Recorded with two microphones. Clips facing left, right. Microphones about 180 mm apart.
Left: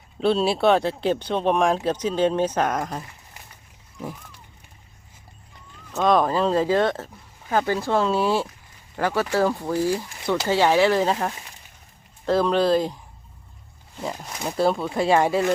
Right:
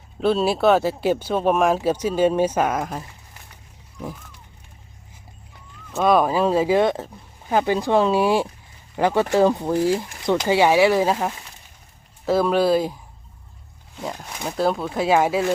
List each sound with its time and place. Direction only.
0.2 s speech: centre (ahead or behind)
5.9 s speech: 5° right (ahead or behind)